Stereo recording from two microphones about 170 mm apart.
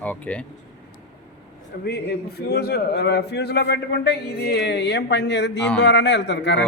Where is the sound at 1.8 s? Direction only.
70° left (ahead or behind); by 6.5 s 90° left.